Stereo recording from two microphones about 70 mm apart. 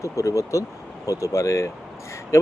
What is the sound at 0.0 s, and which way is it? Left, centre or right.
Speech, left.